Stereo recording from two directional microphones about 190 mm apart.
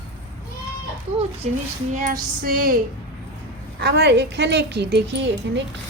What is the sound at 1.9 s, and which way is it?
Music, 45° right (ahead or behind).